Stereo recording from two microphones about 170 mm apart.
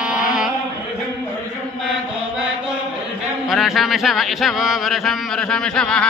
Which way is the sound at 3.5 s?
Centre (ahead or behind).